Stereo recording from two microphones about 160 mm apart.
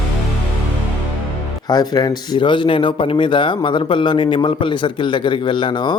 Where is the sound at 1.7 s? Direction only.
25° left (ahead or behind).